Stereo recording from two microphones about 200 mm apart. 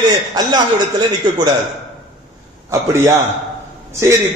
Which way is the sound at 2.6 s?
15° right (ahead or behind).